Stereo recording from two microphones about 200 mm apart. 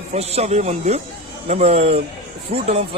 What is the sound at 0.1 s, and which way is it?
Speech, 35° right (ahead or behind).